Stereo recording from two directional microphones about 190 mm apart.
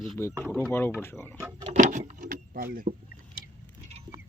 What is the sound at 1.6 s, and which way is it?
Vehicle, 40° right (ahead or behind).